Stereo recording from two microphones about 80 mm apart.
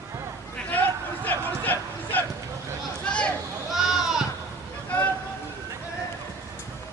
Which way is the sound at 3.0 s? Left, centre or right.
Centre.